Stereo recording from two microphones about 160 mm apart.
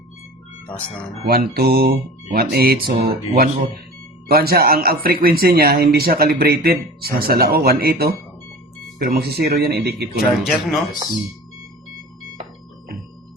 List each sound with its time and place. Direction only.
1.2 s a man's voice: 70° right (ahead or behind); by 10.1 s 85° right
10.2 s speech: centre (ahead or behind)